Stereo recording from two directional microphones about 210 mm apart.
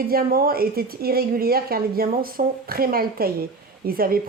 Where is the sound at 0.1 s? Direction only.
45° right (ahead or behind).